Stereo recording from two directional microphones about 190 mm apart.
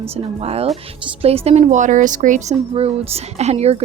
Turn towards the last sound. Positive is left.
turn(degrees=-35)  # may be behind; listen again after turning